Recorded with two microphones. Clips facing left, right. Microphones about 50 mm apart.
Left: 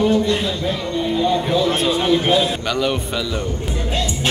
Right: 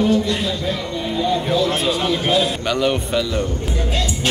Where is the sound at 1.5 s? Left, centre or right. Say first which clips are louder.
Left 1 dB; centre.